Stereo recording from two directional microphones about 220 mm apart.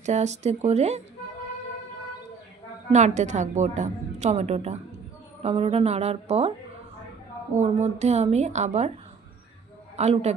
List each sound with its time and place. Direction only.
0.0 s a woman's voice: 30° right (ahead or behind)
2.9 s a woman's voice: 30° right (ahead or behind)
7.5 s a woman's voice: 30° right (ahead or behind)
9.9 s speech: 30° right (ahead or behind)